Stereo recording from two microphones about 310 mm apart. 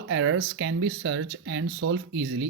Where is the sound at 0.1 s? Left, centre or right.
Right.